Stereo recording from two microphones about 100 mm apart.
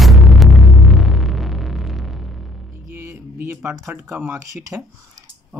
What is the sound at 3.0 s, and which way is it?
Music, 20° right (ahead or behind).